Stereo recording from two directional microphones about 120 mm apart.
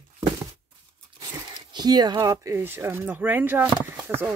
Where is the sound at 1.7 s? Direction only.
35° right (ahead or behind).